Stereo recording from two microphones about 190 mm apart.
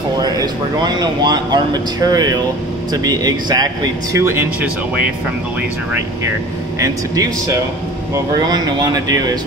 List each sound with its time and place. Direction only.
0.2 s speech: 20° right (ahead or behind)
6.8 s speech: 15° right (ahead or behind)